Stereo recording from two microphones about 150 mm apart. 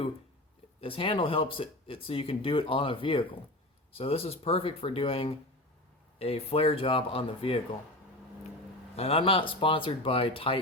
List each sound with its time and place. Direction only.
0.8 s speech: 35° left (ahead or behind)
9.0 s speech: 40° left (ahead or behind)